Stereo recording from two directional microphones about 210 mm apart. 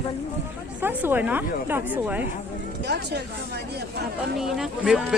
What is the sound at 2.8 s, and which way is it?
Speech, 55° right (ahead or behind).